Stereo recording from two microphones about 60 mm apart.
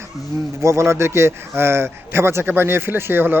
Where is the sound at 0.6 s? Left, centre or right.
Right.